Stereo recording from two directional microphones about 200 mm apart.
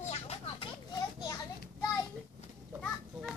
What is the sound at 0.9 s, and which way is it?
Children playing, 20° left (ahead or behind).